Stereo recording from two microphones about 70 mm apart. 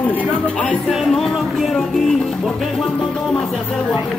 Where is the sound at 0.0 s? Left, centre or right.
Left.